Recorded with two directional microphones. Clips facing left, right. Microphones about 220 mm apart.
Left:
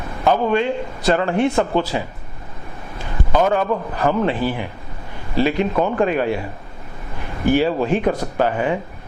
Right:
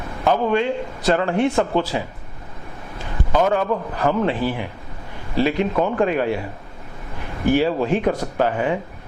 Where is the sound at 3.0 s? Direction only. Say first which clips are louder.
Left 1 dB; 20° left (ahead or behind).